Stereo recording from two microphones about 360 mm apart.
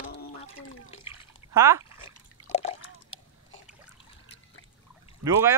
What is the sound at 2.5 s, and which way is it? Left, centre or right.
Liquid, centre.